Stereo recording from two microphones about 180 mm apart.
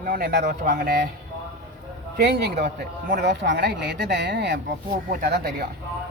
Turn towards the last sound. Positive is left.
turn(degrees=-60)  # may be behind; listen again after turning